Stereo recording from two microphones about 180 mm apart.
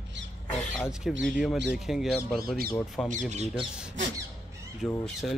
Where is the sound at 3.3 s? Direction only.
40° right (ahead or behind).